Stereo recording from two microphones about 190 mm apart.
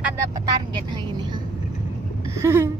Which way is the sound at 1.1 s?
25° right (ahead or behind).